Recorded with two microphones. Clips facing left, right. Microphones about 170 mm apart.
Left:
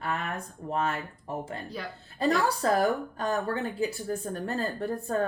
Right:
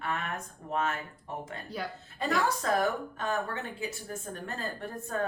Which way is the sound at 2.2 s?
35° left (ahead or behind).